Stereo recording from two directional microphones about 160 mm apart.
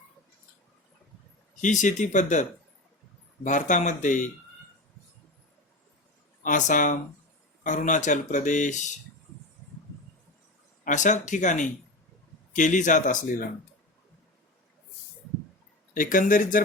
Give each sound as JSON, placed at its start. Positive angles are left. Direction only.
{"t": 1.6, "sound": "speech", "side_deg": 50}
{"t": 6.4, "sound": "speech", "side_deg": 55}
{"t": 10.8, "sound": "speech", "side_deg": 50}
{"t": 16.0, "sound": "speech", "side_deg": 60}